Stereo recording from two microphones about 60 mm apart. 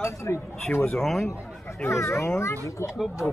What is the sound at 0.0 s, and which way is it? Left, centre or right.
Speech, left.